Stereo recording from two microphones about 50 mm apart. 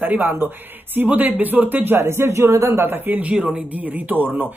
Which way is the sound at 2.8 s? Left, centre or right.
Right.